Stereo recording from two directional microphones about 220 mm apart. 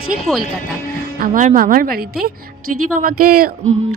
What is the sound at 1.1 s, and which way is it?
Speech, 40° right (ahead or behind).